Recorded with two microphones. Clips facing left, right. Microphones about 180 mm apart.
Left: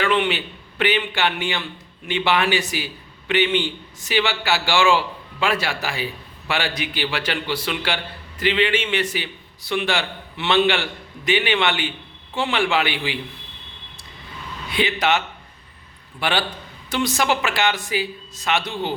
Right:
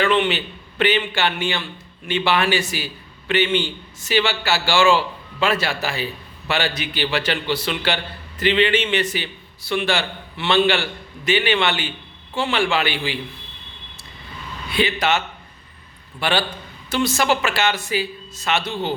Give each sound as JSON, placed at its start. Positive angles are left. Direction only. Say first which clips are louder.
{"t": 0.0, "sound": "a man's voice", "louder": "right 2 dB", "side_deg": 10}
{"t": 14.7, "sound": "a man's voice", "louder": "even", "side_deg": 20}
{"t": 16.2, "sound": "a man's voice", "louder": "right 1 dB", "side_deg": 15}